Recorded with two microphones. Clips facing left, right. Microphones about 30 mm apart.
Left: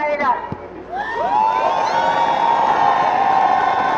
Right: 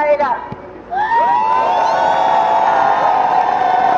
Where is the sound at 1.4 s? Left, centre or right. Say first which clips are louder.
Right 2 dB; centre.